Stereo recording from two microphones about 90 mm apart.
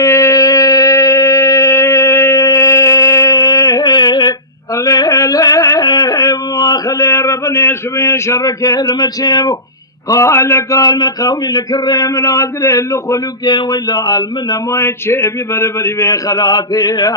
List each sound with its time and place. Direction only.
0.0 s a sound: 35° left (ahead or behind); by 4.4 s 50° left (ahead or behind)
4.7 s a sound: 40° left (ahead or behind)
5.8 s male singing: 50° left (ahead or behind); by 8.4 s 35° left (ahead or behind)
8.4 s speech: 50° left (ahead or behind)
10.1 s speech: 35° left (ahead or behind)
10.9 s speech: 50° left (ahead or behind)
13.4 s speech: 55° left (ahead or behind); by 16.0 s 30° left (ahead or behind)
16.0 s speech: 40° left (ahead or behind)